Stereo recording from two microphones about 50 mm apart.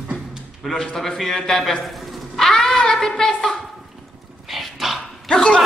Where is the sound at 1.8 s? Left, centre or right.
Centre.